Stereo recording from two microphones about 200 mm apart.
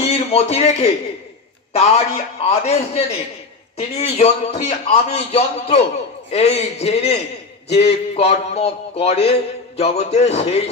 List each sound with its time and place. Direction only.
0.0 s a man's voice: 30° left (ahead or behind)
8.2 s a man's voice: 30° left (ahead or behind)